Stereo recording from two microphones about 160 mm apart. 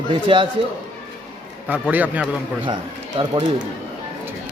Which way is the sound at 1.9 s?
10° right (ahead or behind).